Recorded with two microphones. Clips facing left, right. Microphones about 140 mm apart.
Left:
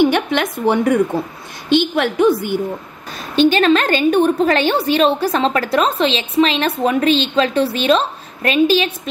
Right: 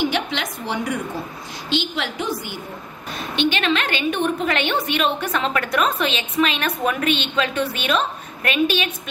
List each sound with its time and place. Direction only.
0.0 s a woman's voice: 55° left (ahead or behind)
3.2 s a woman's voice: 40° left (ahead or behind)